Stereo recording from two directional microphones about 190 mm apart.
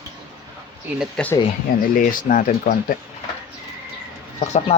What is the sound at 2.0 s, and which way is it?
Speech, 45° left (ahead or behind).